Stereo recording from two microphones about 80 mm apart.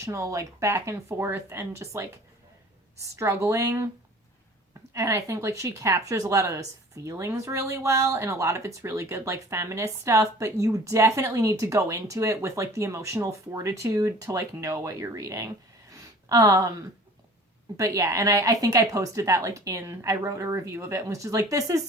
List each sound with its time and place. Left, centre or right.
0.0 s speech: right
4.9 s speech: right
15.9 s a sound: right
17.7 s speech: right